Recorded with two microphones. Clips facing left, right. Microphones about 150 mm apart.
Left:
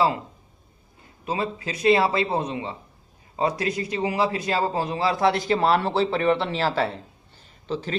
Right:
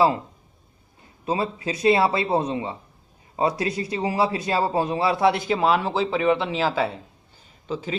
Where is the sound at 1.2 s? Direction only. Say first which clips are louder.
Right 2 dB; 25° right (ahead or behind).